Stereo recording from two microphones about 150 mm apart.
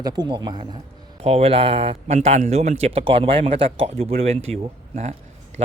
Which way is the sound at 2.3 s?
50° right (ahead or behind).